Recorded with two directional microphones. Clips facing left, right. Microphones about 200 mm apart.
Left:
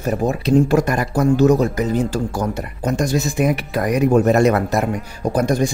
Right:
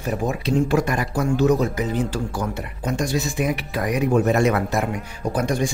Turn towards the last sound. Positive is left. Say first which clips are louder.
# left 5 dB
turn(degrees=40)  # may be behind; listen again after turning